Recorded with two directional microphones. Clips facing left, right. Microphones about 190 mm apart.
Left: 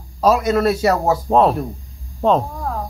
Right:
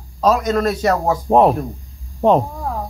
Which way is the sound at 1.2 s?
15° right (ahead or behind).